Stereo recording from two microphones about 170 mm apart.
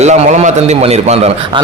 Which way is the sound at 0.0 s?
45° right (ahead or behind).